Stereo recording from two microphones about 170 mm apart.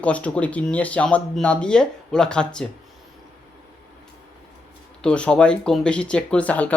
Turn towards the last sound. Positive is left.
turn(degrees=10)  # may be behind; listen again after turning